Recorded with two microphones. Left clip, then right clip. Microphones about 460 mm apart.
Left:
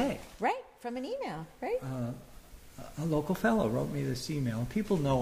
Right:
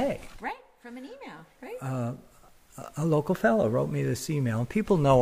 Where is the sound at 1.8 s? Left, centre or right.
Right.